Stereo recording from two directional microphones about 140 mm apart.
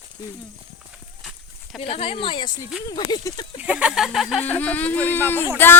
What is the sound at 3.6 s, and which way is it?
Speech, 10° right (ahead or behind).